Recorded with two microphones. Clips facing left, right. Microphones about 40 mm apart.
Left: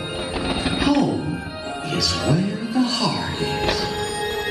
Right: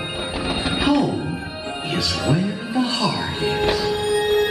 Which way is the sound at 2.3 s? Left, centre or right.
Right.